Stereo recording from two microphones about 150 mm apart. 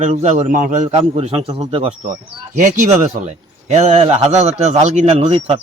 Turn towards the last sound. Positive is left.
turn(degrees=-40)  # may be behind; listen again after turning